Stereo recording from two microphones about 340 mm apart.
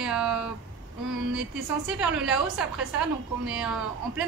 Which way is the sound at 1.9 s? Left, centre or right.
Centre.